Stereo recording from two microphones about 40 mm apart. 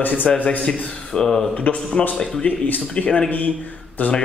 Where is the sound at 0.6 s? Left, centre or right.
Left.